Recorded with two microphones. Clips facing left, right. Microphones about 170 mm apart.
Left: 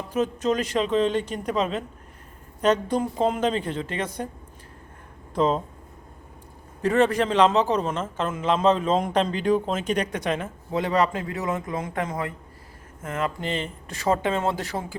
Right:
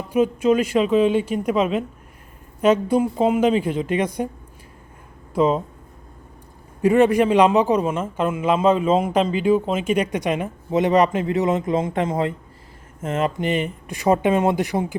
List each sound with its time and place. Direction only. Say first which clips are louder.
0.1 s a man's voice: right 6 dB; 10° right (ahead or behind)
5.3 s a man's voice: right 4 dB; 5° right (ahead or behind)
6.8 s a man's voice: right 5 dB; 10° right (ahead or behind)